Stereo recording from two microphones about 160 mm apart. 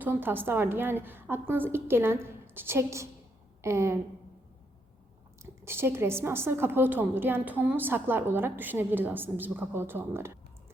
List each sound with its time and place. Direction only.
0.0 s a woman's voice: 15° right (ahead or behind)
5.4 s a woman's voice: 15° right (ahead or behind)